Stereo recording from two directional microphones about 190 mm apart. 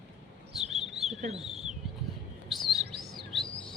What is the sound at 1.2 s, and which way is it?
Speech, 35° right (ahead or behind).